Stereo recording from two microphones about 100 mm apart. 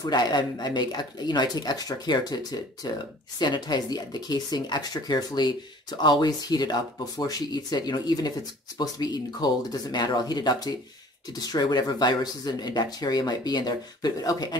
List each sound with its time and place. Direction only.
0.0 s speech: 45° left (ahead or behind)